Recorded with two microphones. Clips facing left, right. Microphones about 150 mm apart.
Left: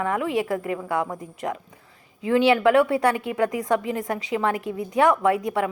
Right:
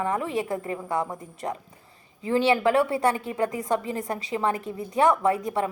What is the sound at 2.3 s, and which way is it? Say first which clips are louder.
A woman's voice: left 3 dB; 30° right (ahead or behind).